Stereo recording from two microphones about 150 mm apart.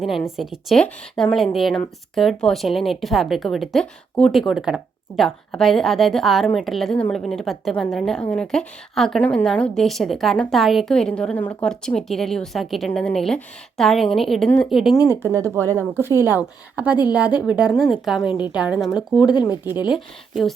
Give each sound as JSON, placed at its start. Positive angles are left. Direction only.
{"t": 0.3, "sound": "speech", "side_deg": 0}
{"t": 15.0, "sound": "a woman's voice", "side_deg": -15}
{"t": 19.3, "sound": "speech", "side_deg": 30}
{"t": 19.6, "sound": "a woman's voice", "side_deg": -15}